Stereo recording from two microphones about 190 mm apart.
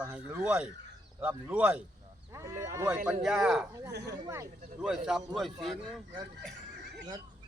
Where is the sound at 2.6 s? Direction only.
15° right (ahead or behind).